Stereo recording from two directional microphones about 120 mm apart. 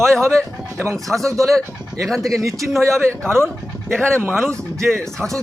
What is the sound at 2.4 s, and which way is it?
Speech, 25° right (ahead or behind).